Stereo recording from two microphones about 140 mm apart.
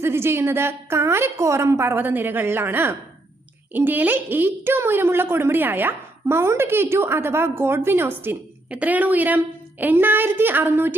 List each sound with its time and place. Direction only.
0.0 s speech: 15° right (ahead or behind)